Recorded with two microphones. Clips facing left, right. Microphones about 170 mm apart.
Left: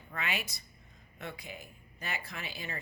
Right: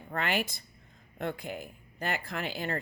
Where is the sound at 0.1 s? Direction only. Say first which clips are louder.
Right 7 dB; 55° right (ahead or behind).